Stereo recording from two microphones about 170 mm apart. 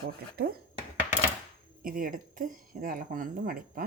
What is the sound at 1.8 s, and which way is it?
Speech, 55° right (ahead or behind).